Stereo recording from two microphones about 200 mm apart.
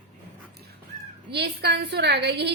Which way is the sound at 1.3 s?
55° right (ahead or behind).